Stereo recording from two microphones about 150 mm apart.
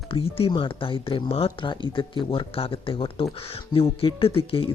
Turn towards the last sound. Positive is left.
turn(degrees=35)  # may be behind; listen again after turning